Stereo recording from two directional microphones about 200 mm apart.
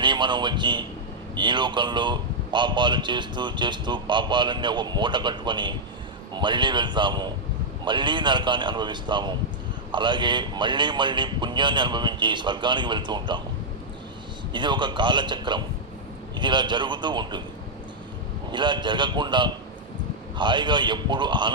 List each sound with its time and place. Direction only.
0.0 s a man's voice: 25° right (ahead or behind)
14.5 s a man's voice: 25° right (ahead or behind)
18.5 s a man's voice: 25° right (ahead or behind)